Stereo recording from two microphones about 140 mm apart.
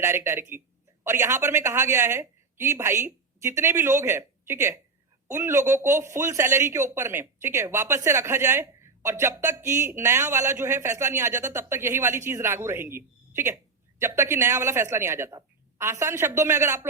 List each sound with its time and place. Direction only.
0.0 s speech: 20° right (ahead or behind)